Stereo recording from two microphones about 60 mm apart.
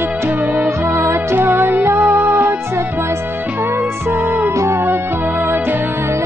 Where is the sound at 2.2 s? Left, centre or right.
Right.